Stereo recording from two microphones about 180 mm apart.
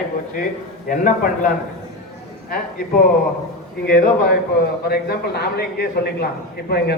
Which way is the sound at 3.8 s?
60° left (ahead or behind).